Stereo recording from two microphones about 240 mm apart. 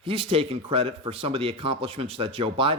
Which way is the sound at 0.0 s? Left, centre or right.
Right.